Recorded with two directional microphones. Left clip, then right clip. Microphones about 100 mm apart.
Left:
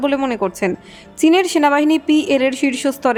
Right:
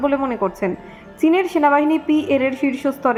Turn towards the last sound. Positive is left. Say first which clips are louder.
# left 2 dB
turn(degrees=10)  # may be behind; listen again after turning